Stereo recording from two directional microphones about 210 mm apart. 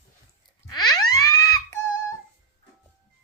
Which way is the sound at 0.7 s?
20° left (ahead or behind).